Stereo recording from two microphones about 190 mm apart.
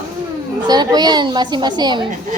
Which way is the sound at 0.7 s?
20° right (ahead or behind).